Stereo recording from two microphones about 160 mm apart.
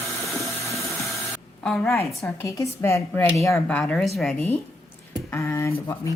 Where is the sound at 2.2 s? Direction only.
20° left (ahead or behind); by 4.4 s centre (ahead or behind).